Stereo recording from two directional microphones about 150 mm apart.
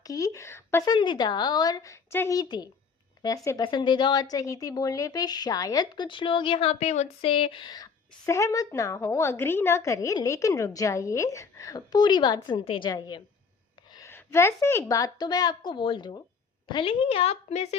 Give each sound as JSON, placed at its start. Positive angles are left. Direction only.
{"t": 0.0, "sound": "a woman's voice", "side_deg": 25}